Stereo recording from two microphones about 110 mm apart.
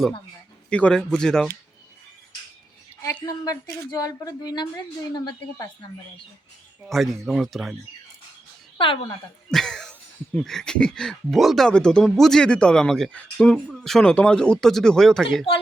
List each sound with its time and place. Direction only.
0.7 s speech: 10° left (ahead or behind)
3.4 s speech: 35° left (ahead or behind)
6.8 s speech: centre (ahead or behind)
9.5 s speech: 5° left (ahead or behind)